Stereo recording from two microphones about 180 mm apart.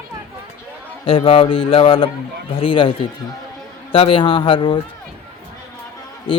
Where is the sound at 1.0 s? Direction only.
30° left (ahead or behind).